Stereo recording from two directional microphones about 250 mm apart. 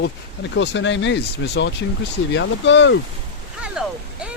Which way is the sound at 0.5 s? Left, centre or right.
Left.